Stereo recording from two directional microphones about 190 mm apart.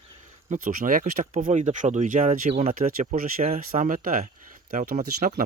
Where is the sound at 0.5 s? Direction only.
45° right (ahead or behind).